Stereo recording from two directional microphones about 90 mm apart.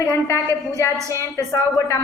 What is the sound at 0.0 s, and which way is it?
A woman's voice, 30° left (ahead or behind).